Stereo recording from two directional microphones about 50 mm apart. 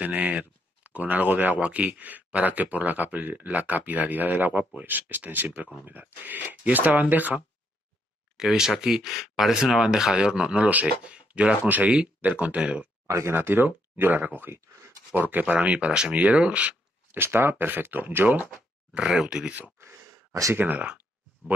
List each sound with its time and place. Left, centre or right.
0.0 s speech: right
8.4 s speech: centre; by 12.8 s right
13.3 s speech: right
15.1 s speech: right
17.1 s speech: right
18.9 s speech: centre
19.8 s sigh: right
20.5 s speech: right